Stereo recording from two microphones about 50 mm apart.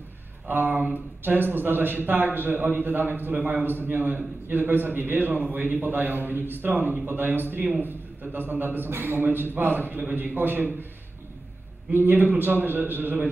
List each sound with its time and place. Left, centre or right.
0.5 s a man's voice: right
11.9 s a man's voice: right